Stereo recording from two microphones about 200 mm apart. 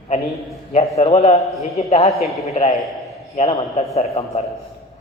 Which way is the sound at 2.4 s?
30° left (ahead or behind).